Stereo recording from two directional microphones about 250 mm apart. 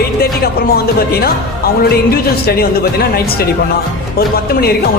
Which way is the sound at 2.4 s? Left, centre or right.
Left.